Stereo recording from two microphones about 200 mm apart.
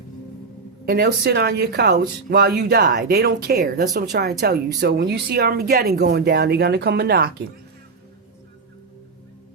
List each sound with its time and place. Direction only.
0.9 s speech: 50° right (ahead or behind)